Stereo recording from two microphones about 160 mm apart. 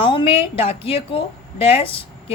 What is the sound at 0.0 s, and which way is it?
A woman's voice, 30° left (ahead or behind).